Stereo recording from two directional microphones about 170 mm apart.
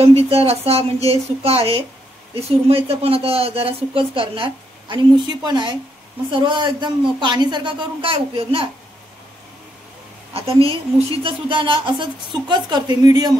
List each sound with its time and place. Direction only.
0.2 s a woman's voice: 35° right (ahead or behind)
10.3 s a woman's voice: 35° right (ahead or behind)